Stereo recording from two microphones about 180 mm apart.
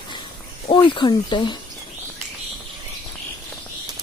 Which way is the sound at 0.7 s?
25° left (ahead or behind).